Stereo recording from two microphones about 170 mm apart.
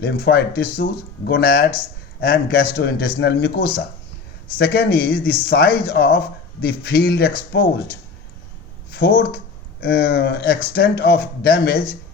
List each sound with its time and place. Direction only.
0.0 s speech: 70° left (ahead or behind)
3.2 s speech: 75° left (ahead or behind)